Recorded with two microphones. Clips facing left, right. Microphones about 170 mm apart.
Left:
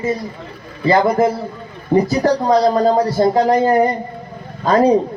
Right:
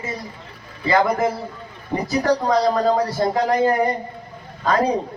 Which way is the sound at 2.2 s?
30° left (ahead or behind).